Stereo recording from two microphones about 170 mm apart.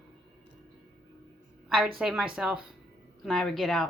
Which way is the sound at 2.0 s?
5° right (ahead or behind).